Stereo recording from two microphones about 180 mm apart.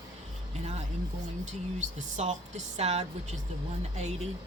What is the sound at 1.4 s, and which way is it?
Speech, 40° right (ahead or behind).